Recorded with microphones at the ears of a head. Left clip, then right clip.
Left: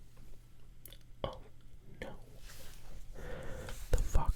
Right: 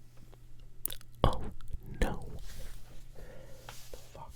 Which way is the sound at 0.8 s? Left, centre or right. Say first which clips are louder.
Right 10 dB; right.